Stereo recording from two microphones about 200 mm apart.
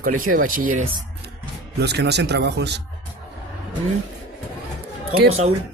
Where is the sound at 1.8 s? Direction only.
55° right (ahead or behind).